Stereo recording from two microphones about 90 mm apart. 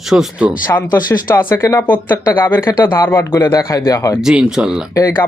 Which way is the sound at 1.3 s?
25° left (ahead or behind).